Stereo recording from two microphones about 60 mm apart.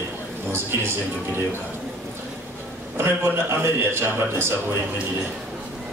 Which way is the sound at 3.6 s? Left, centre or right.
Right.